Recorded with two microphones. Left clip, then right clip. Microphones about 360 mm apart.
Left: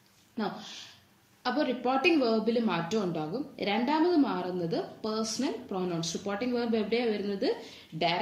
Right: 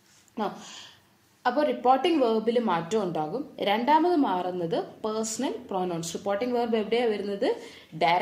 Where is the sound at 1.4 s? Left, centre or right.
Centre.